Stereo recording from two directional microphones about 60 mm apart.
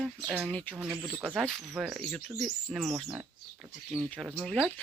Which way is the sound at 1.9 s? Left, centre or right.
Centre.